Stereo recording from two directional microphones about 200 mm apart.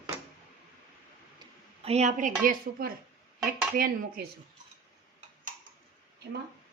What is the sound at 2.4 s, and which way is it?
Speech, 45° right (ahead or behind).